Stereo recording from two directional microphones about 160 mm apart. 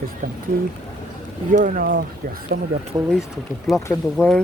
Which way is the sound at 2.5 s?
75° right (ahead or behind).